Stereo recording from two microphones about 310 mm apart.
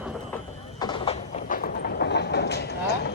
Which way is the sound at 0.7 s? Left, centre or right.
Centre.